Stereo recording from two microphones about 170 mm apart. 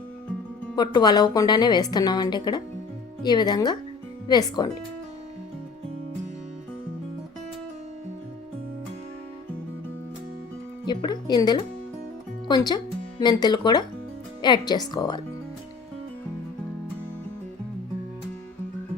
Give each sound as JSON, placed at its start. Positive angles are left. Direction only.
{"t": 0.8, "sound": "a woman's voice", "side_deg": 25}
{"t": 10.8, "sound": "a woman's voice", "side_deg": 25}